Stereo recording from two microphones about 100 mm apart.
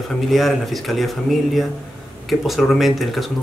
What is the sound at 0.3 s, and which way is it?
Speech, centre (ahead or behind).